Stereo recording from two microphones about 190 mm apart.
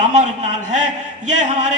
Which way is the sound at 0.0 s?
40° right (ahead or behind).